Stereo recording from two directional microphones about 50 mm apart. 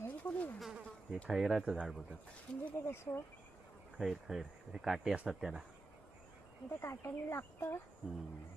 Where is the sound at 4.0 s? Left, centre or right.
Centre.